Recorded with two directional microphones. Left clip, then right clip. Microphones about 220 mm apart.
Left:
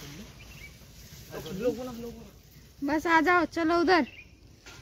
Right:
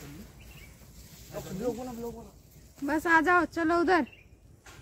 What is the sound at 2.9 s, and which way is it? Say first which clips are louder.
Speech: even; 15° left (ahead or behind).